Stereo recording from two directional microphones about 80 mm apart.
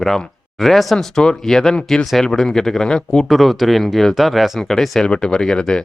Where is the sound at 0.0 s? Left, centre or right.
Centre.